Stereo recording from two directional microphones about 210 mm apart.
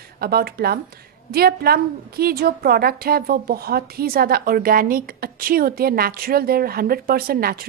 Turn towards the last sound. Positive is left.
turn(degrees=-45)  # may be behind; listen again after turning